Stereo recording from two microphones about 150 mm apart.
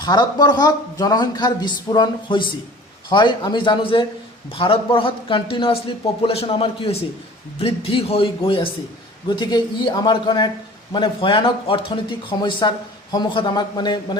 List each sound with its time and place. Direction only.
0.0 s a man's voice: 25° left (ahead or behind)